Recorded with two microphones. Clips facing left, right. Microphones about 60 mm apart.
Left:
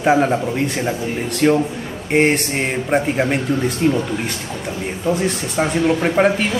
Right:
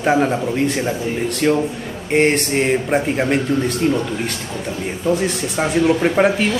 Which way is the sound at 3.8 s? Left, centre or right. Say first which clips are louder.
Left 2 dB; centre.